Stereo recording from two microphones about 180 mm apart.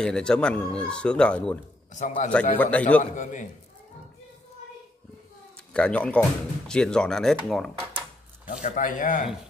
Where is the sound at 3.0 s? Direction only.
45° left (ahead or behind).